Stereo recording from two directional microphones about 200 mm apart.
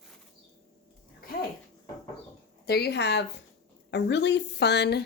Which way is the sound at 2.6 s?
55° left (ahead or behind).